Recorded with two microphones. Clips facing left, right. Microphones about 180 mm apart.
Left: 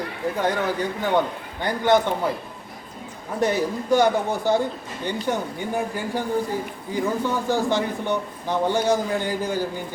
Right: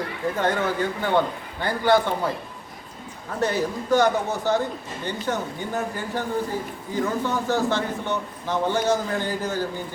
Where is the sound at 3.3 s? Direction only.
15° left (ahead or behind).